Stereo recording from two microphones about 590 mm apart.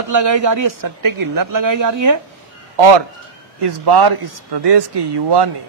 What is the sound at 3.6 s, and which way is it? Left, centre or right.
A man's voice, right.